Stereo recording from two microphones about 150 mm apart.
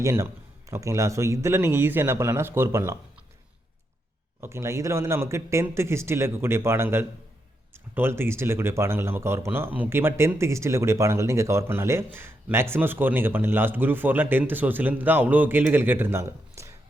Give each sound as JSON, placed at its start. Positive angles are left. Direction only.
{"t": 0.0, "sound": "a man's voice", "side_deg": -20}
{"t": 4.4, "sound": "speech", "side_deg": -15}